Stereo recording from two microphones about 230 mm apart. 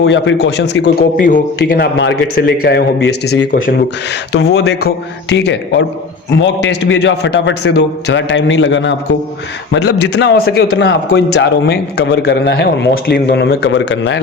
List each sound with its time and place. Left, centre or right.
0.0 s a man's voice: left